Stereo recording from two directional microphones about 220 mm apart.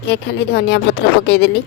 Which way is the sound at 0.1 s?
50° left (ahead or behind).